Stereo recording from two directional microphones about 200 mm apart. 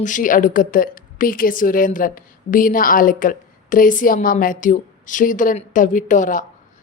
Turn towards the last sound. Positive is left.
turn(degrees=40)  # may be behind; listen again after turning